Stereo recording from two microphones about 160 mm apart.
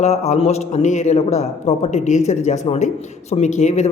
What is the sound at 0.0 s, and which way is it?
A man's voice, 45° left (ahead or behind).